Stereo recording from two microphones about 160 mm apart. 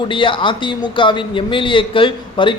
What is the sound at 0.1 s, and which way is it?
A man's voice, 30° left (ahead or behind).